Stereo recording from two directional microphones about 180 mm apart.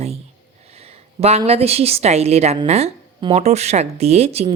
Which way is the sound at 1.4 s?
35° right (ahead or behind).